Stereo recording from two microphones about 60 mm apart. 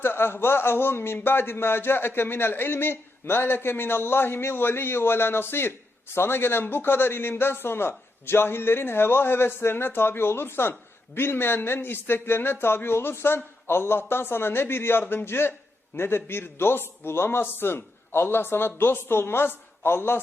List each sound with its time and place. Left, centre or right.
0.0 s a man's voice: left